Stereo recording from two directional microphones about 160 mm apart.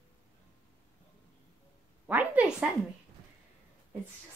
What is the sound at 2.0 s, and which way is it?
Speech, 10° right (ahead or behind).